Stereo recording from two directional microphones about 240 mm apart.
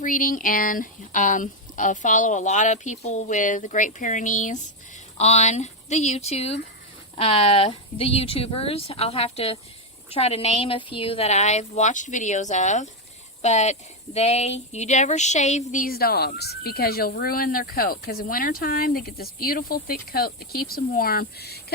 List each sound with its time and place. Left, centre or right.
0.0 s speech: left